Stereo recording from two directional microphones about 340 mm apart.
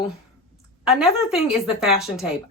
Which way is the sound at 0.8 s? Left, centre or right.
Centre.